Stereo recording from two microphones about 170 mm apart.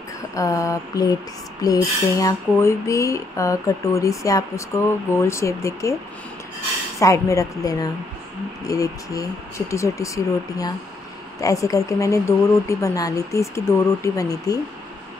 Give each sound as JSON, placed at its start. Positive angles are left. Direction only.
{"t": 0.3, "sound": "speech", "side_deg": 20}
{"t": 7.0, "sound": "speech", "side_deg": 20}